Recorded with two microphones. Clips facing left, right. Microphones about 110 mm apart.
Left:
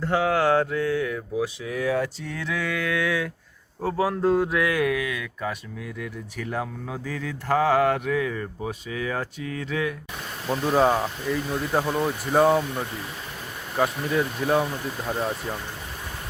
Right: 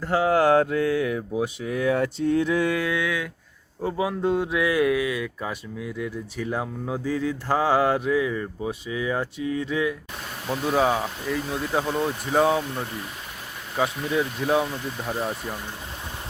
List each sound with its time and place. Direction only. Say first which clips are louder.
0.3 s mantra: right 4 dB; 40° right (ahead or behind)
1.6 s speech: right 2 dB; 30° right (ahead or behind)
2.2 s mantra: right 8 dB; 35° right (ahead or behind)
3.8 s speech: left 1 dB; 15° right (ahead or behind)
4.2 s speech: left 3 dB; 35° left (ahead or behind)
4.5 s speech: right 2 dB; 25° right (ahead or behind)
10.5 s speech: left 2 dB; centre (ahead or behind)